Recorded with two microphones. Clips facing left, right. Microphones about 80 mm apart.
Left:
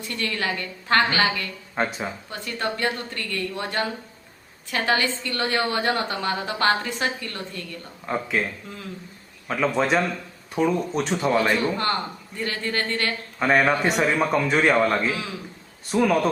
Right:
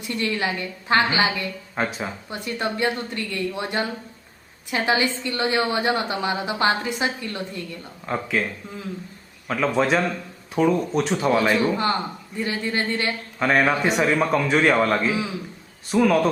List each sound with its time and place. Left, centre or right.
0.1 s a woman's voice: centre
1.7 s a man's voice: centre
2.3 s a woman's voice: centre
8.0 s a man's voice: centre
9.5 s a man's voice: centre
13.4 s a man's voice: centre